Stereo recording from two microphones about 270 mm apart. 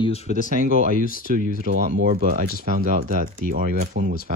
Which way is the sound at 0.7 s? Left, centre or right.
Right.